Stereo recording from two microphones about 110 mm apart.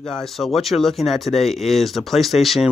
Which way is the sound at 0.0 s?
5° left (ahead or behind).